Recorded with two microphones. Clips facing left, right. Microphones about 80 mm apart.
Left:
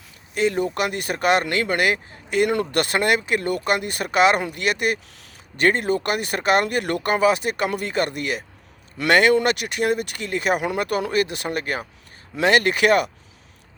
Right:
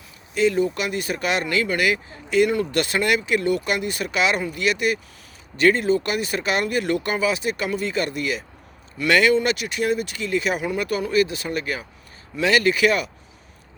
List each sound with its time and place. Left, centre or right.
0.3 s speech: left